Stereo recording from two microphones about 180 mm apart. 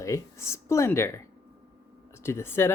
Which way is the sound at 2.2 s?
15° left (ahead or behind).